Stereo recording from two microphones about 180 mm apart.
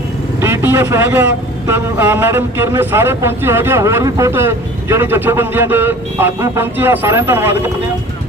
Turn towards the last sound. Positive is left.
turn(degrees=-10)  # may be behind; listen again after turning